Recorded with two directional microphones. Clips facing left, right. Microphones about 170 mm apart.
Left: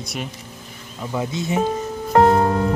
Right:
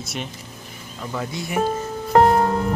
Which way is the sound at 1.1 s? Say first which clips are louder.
Left 5 dB; 20° left (ahead or behind).